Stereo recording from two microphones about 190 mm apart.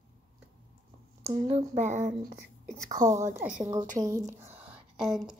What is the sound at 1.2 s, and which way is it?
Speech, 35° right (ahead or behind).